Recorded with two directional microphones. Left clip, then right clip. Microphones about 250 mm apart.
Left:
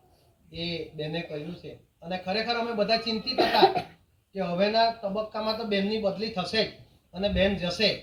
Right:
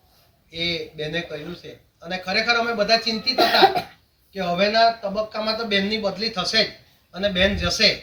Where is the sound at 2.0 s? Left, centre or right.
Centre.